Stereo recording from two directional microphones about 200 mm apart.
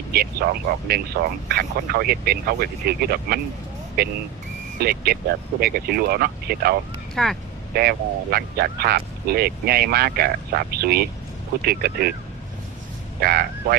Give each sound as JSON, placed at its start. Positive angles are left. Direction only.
{"t": 0.1, "sound": "speech", "side_deg": -50}
{"t": 4.8, "sound": "speech", "side_deg": -50}
{"t": 7.2, "sound": "speech", "side_deg": 5}
{"t": 7.7, "sound": "speech", "side_deg": -50}
{"t": 13.2, "sound": "speech", "side_deg": -50}